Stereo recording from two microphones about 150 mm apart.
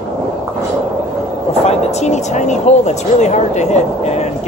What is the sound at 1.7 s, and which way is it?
Speech, 45° left (ahead or behind).